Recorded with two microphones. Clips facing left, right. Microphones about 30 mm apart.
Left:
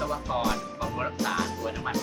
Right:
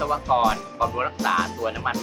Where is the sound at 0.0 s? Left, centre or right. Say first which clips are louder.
Right 8 dB; right.